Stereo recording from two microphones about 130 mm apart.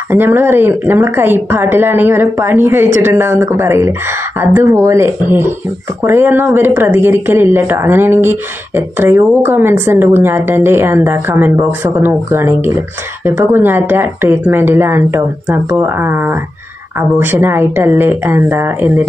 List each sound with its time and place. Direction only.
0.1 s a woman's voice: 15° right (ahead or behind)